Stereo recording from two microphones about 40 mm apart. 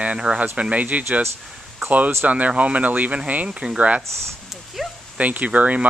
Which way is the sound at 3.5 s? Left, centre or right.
Right.